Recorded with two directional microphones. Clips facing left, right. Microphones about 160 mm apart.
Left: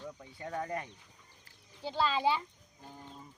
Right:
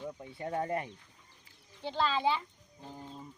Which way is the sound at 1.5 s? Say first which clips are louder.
Right 1 dB; 10° left (ahead or behind).